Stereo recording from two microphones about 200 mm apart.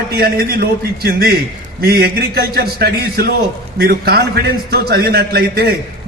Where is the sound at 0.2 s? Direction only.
50° right (ahead or behind).